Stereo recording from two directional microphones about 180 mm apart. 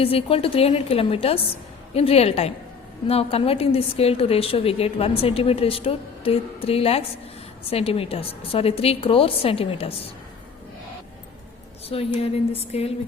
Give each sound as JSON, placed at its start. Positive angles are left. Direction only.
{"t": 0.0, "sound": "a woman's voice", "side_deg": 30}
{"t": 11.9, "sound": "a woman's voice", "side_deg": 35}